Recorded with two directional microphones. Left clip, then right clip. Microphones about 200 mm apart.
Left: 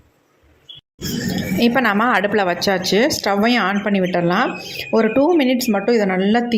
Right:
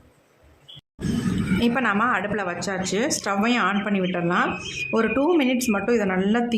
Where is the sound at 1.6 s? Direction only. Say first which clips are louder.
Left 6 dB; 25° left (ahead or behind).